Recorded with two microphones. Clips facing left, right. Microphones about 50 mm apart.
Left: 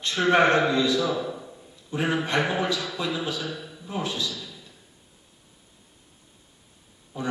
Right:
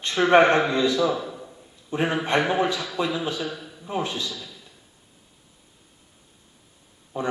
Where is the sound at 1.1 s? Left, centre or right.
Centre.